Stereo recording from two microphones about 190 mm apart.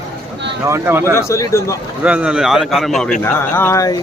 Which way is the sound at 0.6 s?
15° right (ahead or behind).